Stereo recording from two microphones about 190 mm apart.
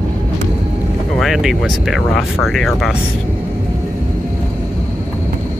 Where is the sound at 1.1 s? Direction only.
Centre (ahead or behind).